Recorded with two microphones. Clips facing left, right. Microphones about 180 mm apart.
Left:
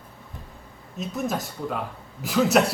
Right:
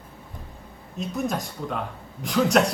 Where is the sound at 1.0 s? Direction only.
Centre (ahead or behind).